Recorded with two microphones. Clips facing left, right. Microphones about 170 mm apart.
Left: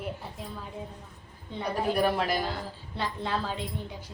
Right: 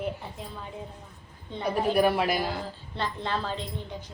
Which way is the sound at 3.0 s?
5° left (ahead or behind).